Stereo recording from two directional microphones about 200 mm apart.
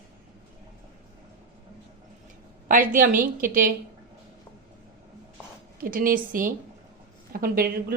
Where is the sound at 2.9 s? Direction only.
45° right (ahead or behind).